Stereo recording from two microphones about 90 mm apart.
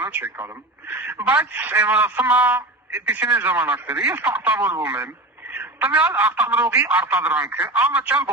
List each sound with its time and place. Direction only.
0.0 s a man's voice: 20° right (ahead or behind)